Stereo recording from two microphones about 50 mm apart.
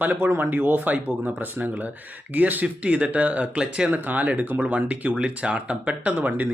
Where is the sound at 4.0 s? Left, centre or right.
Right.